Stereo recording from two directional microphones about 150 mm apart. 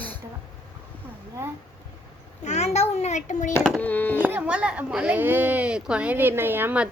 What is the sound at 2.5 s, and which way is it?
A child's voice, 50° left (ahead or behind).